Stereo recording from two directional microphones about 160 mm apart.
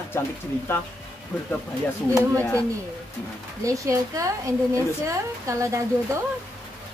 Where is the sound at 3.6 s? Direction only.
20° right (ahead or behind).